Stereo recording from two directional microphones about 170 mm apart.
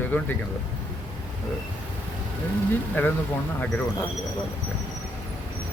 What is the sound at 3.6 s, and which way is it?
Speech, 10° left (ahead or behind).